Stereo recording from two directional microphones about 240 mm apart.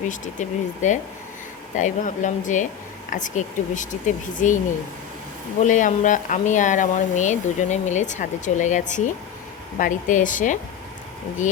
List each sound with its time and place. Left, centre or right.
0.1 s speech: left